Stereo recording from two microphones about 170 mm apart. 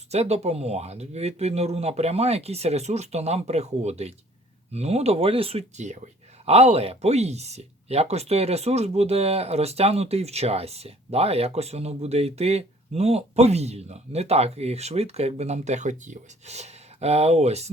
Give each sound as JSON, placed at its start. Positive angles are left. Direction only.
{"t": 0.1, "sound": "speech", "side_deg": -40}